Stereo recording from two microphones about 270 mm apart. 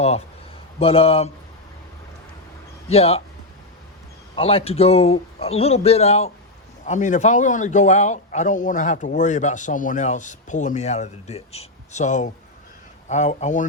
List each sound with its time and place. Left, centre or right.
0.8 s a man's voice: left
2.9 s a man's voice: left
4.4 s a man's voice: left